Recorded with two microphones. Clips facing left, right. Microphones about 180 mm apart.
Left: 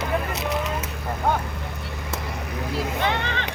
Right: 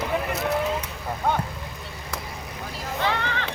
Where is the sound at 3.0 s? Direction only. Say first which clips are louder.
Right 3 dB; 20° left (ahead or behind).